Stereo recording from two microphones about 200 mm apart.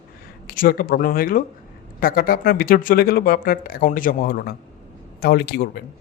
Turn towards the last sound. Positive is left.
turn(degrees=50)  # may be behind; listen again after turning